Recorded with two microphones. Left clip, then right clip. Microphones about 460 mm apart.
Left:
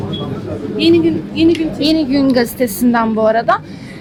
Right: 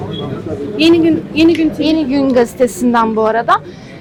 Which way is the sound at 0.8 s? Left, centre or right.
Right.